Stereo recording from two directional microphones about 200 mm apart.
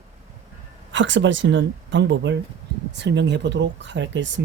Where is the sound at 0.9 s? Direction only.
65° right (ahead or behind).